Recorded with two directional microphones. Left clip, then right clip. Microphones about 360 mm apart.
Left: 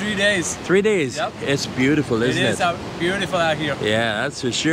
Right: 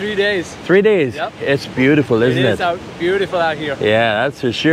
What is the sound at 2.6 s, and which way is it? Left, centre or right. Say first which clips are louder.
Speech: right 3 dB; left.